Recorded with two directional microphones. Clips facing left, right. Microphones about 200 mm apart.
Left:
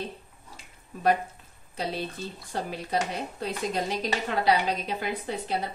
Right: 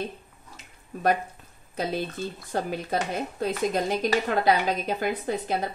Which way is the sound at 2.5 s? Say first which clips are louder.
Right 2 dB; 45° right (ahead or behind).